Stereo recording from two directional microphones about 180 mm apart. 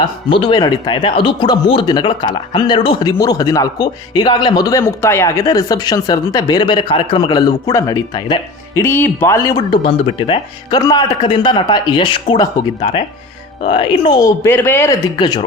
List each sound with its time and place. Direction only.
0.3 s speech: 25° left (ahead or behind)
8.8 s speech: 10° left (ahead or behind); by 14.3 s 25° left (ahead or behind)
14.4 s speech: 10° left (ahead or behind)